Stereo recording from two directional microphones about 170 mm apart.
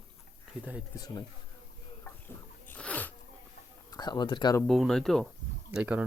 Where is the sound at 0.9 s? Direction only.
20° left (ahead or behind).